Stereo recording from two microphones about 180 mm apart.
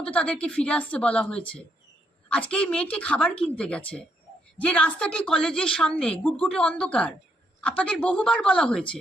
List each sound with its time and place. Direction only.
0.0 s a woman's voice: 5° left (ahead or behind)